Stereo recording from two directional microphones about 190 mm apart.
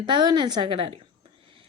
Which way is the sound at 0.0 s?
20° right (ahead or behind).